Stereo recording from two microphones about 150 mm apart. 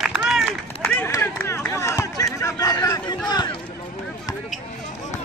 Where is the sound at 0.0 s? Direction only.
Centre (ahead or behind).